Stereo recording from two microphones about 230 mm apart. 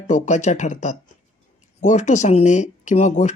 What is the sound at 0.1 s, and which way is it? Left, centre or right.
Speech, left.